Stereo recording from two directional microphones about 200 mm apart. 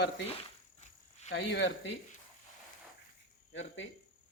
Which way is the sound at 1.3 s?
65° left (ahead or behind).